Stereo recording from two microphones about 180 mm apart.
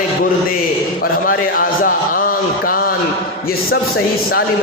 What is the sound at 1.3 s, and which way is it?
A man's voice, 55° left (ahead or behind).